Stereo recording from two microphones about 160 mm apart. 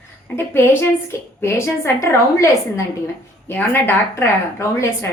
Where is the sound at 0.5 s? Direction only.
15° left (ahead or behind).